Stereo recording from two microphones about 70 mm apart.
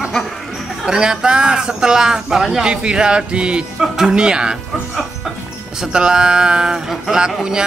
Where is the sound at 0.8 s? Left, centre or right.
Centre.